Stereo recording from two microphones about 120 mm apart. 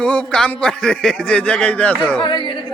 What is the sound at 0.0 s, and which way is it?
A man's voice, 10° left (ahead or behind).